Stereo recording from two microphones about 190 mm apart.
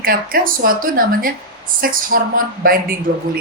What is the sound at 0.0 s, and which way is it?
A woman's voice, 50° right (ahead or behind).